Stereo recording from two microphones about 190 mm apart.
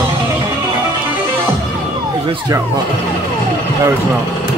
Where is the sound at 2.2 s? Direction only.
20° right (ahead or behind).